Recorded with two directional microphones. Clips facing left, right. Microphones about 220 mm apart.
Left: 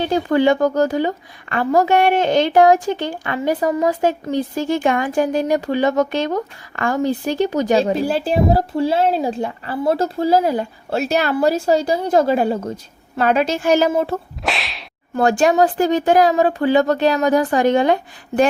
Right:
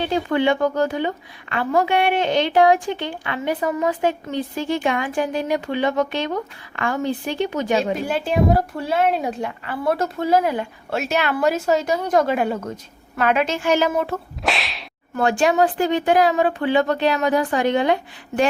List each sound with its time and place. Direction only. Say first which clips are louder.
0.0 s a woman's voice: left 4 dB; 40° left (ahead or behind)
14.4 s whip: even; centre (ahead or behind)
15.1 s a woman's voice: left 3 dB; 40° left (ahead or behind)